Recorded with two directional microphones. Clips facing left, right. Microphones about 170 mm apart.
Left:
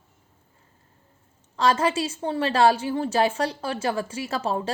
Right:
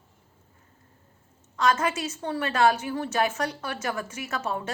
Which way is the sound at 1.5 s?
30° left (ahead or behind).